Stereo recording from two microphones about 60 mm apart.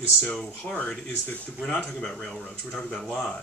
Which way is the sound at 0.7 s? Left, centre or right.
Centre.